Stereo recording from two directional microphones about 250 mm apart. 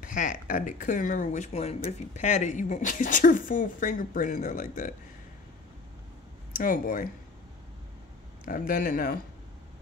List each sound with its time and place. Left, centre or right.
0.0 s speech: left
6.6 s speech: left
8.5 s speech: left